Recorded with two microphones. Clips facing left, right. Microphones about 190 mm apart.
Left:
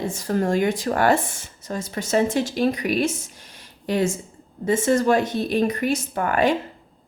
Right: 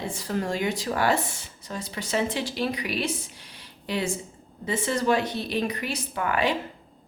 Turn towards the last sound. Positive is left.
turn(degrees=45)  # may be behind; listen again after turning